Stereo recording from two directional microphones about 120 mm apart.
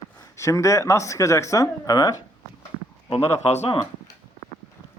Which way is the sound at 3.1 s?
65° left (ahead or behind).